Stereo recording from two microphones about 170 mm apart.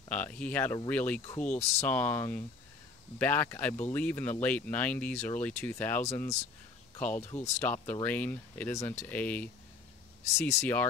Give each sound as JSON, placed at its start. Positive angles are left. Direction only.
{"t": 0.1, "sound": "speech", "side_deg": 10}
{"t": 7.2, "sound": "speech", "side_deg": 40}
{"t": 7.6, "sound": "speech", "side_deg": 10}